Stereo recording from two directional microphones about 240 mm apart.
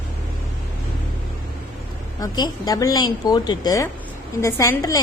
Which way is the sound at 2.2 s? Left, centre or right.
Centre.